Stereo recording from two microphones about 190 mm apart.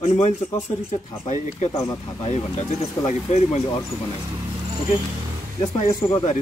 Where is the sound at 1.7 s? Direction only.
15° left (ahead or behind).